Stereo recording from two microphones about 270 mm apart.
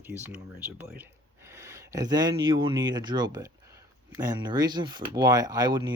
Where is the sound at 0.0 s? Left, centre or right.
Centre.